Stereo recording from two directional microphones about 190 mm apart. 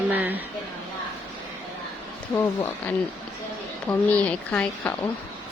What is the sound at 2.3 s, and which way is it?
Speech, 10° left (ahead or behind).